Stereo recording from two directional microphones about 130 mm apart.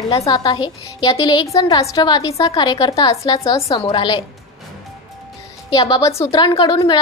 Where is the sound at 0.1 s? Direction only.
30° left (ahead or behind).